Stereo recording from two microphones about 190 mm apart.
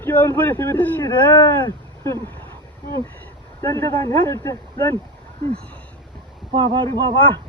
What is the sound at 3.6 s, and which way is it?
Speech, 15° left (ahead or behind).